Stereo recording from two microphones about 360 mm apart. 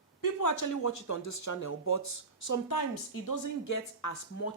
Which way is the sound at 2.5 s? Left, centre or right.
Left.